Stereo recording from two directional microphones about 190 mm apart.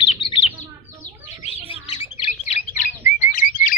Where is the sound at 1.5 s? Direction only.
30° right (ahead or behind).